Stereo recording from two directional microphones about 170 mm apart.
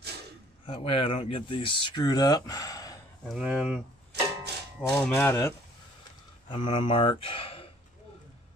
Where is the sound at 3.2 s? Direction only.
Centre (ahead or behind).